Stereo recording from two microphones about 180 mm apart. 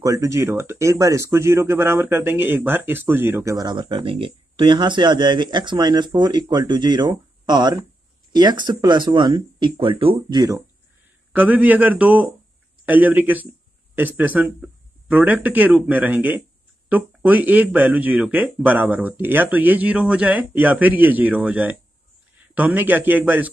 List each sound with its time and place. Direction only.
0.0 s speech: 20° right (ahead or behind)
11.3 s speech: 10° right (ahead or behind)